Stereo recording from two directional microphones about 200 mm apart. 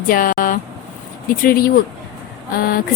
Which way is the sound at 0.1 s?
45° left (ahead or behind).